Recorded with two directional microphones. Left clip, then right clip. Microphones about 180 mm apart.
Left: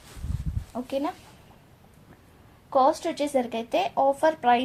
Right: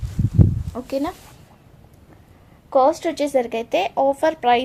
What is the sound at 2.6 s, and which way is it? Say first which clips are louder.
A woman's voice: right 5 dB; 40° right (ahead or behind).